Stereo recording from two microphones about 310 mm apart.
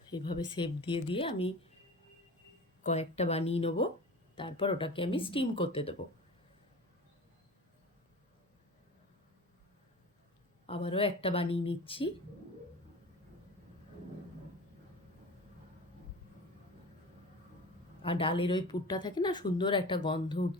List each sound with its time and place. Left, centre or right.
0.1 s speech: centre
2.8 s a woman's voice: left
10.7 s speech: centre
18.0 s speech: centre